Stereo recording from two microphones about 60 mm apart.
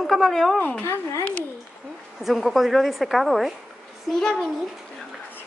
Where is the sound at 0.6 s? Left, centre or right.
Left.